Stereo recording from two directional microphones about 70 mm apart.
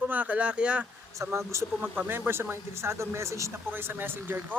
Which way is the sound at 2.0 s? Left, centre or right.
Right.